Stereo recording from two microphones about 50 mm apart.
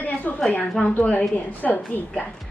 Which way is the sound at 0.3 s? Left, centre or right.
Left.